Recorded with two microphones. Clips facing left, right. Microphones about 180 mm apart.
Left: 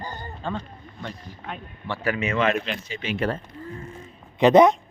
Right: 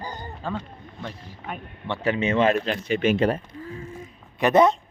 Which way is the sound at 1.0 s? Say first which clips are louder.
Even; 5° right (ahead or behind).